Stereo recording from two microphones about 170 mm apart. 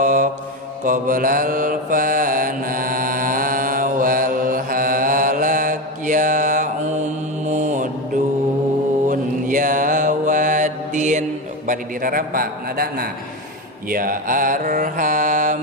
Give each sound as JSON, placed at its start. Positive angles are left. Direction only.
{"t": 0.0, "sound": "mantra", "side_deg": -50}
{"t": 9.1, "sound": "mantra", "side_deg": -50}